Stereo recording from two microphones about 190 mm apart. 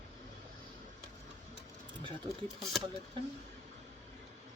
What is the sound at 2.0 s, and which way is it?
Speech, 25° right (ahead or behind).